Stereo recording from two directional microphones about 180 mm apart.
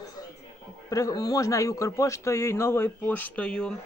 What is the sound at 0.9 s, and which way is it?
Speech, 20° left (ahead or behind).